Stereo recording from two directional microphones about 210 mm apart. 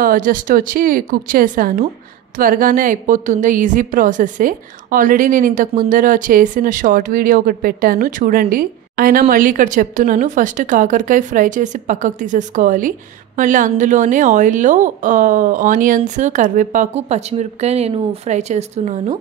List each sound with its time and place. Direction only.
0.0 s a woman's voice: 40° right (ahead or behind)